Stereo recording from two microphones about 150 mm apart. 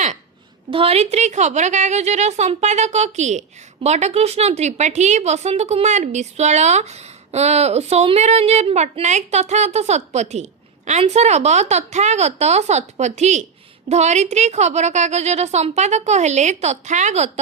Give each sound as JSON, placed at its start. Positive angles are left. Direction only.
{"t": 0.7, "sound": "a woman's voice", "side_deg": -40}